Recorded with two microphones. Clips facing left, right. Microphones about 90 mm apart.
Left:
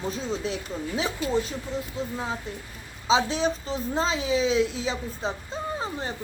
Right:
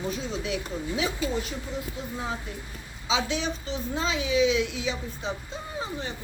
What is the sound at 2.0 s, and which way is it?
A woman's voice, 30° left (ahead or behind).